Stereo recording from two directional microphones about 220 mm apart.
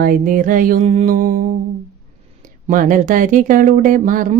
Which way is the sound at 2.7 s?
35° right (ahead or behind).